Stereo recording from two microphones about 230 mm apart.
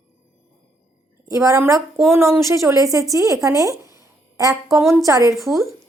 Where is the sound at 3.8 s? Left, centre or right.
Centre.